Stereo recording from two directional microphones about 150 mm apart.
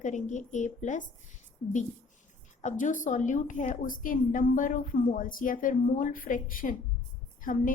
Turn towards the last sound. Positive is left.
turn(degrees=65)  # may be behind; listen again after turning